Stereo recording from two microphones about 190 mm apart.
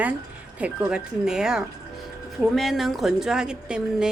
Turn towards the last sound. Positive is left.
turn(degrees=-5)  # may be behind; listen again after turning